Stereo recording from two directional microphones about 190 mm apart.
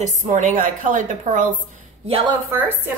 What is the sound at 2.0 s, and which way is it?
Speech, 30° right (ahead or behind).